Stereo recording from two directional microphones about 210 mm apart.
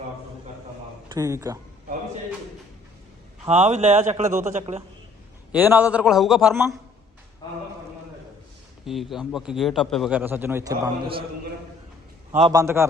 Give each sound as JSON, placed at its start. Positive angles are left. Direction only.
{"t": 1.0, "sound": "speech", "side_deg": -15}
{"t": 3.4, "sound": "speech", "side_deg": -30}
{"t": 5.5, "sound": "a man's voice", "side_deg": -10}
{"t": 8.9, "sound": "a man's voice", "side_deg": 0}
{"t": 12.5, "sound": "a man's voice", "side_deg": -15}